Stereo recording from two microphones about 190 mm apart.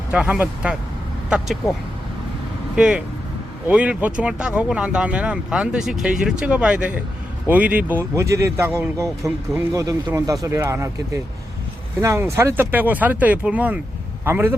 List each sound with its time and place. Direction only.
0.1 s speech: 5° right (ahead or behind)
2.7 s speech: 5° right (ahead or behind)